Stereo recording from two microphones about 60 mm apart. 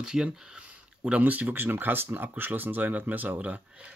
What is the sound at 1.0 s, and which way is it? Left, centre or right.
Speech, right.